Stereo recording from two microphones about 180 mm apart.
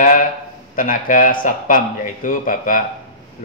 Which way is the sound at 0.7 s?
50° left (ahead or behind).